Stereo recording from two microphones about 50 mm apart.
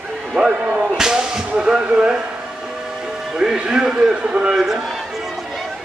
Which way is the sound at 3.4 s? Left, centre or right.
Centre.